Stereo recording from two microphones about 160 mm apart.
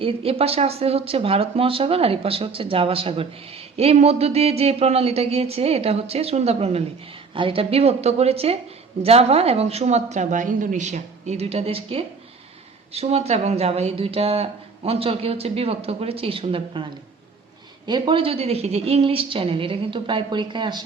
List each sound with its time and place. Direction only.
0.0 s speech: 35° right (ahead or behind)